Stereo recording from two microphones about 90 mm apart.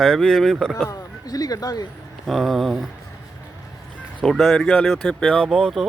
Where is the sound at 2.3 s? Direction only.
Centre (ahead or behind).